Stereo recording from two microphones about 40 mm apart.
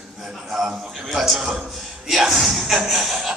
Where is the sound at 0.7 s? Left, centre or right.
Centre.